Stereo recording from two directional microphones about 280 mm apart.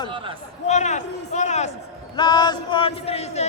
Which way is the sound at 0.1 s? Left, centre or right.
Centre.